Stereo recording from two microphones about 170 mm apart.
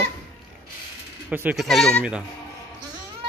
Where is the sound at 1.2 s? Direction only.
10° right (ahead or behind).